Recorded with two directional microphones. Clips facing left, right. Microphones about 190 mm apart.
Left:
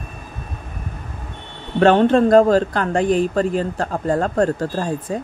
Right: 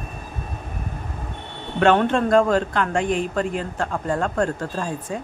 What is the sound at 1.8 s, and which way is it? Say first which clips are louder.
A man's voice: left 5 dB; 35° left (ahead or behind).